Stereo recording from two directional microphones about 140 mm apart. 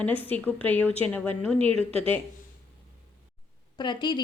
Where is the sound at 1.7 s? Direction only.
45° right (ahead or behind).